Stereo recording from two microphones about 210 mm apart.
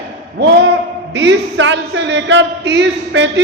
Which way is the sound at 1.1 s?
60° right (ahead or behind).